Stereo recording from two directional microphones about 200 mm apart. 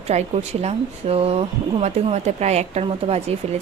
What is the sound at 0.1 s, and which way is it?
Speech, 35° right (ahead or behind).